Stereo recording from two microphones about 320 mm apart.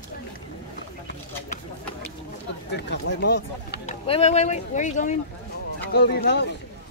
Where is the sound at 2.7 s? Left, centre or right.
Left.